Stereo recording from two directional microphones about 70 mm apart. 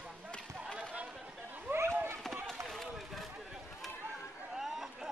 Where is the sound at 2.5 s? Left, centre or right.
Centre.